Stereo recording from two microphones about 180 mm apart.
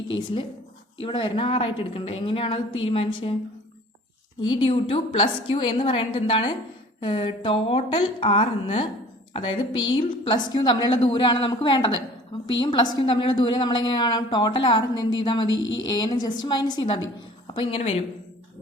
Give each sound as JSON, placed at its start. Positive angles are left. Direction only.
{"t": 0.9, "sound": "a woman's voice", "side_deg": 30}
{"t": 4.5, "sound": "a woman's voice", "side_deg": 30}
{"t": 15.4, "sound": "speech", "side_deg": 90}
{"t": 15.9, "sound": "a woman's voice", "side_deg": 20}